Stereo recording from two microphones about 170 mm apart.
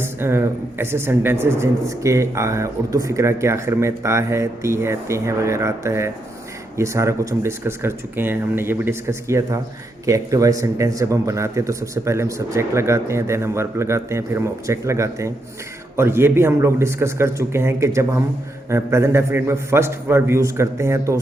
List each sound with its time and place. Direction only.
0.0 s speech: 15° right (ahead or behind)